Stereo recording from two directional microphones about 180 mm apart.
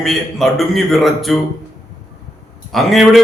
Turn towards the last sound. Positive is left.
turn(degrees=0)  # may be behind; listen again after turning